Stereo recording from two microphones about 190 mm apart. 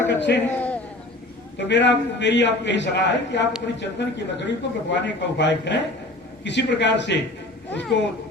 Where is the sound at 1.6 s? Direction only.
70° left (ahead or behind).